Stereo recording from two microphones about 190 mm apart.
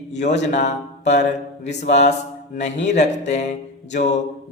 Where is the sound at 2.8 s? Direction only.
40° left (ahead or behind).